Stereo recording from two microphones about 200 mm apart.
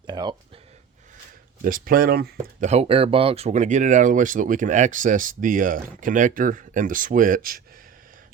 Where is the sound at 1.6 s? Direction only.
45° right (ahead or behind).